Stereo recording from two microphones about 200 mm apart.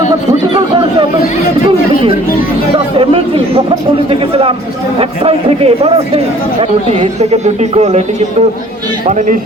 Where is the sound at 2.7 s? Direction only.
25° right (ahead or behind).